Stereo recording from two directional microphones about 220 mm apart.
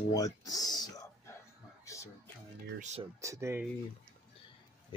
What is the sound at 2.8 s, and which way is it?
Speech, 30° right (ahead or behind).